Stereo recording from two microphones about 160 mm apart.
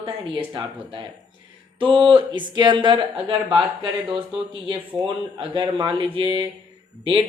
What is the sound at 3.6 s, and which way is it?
Speech, 30° right (ahead or behind).